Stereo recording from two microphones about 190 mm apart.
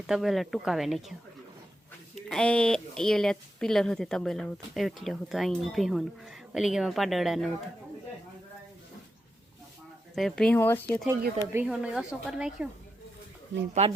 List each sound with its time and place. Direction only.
0.1 s speech: centre (ahead or behind)
2.1 s speech: 5° left (ahead or behind)
10.2 s speech: 5° left (ahead or behind)
11.6 s speech: 5° right (ahead or behind)
13.8 s speech: 35° right (ahead or behind)